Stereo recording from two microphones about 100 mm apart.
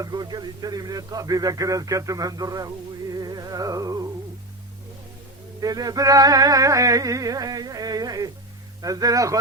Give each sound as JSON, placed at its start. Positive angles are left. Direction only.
{"t": 0.0, "sound": "speech", "side_deg": -40}
{"t": 5.5, "sound": "speech", "side_deg": -40}